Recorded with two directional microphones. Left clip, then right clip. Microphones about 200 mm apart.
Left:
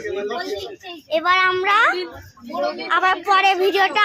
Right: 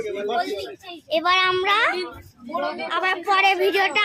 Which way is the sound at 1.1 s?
10° right (ahead or behind).